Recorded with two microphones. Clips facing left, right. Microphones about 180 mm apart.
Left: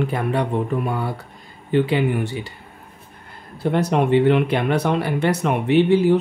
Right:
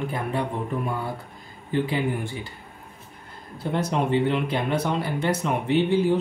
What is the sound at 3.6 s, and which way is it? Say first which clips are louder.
Speech: left 6 dB; 65° left (ahead or behind).